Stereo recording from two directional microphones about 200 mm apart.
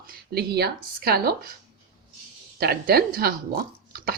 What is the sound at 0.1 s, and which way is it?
Speech, 50° right (ahead or behind).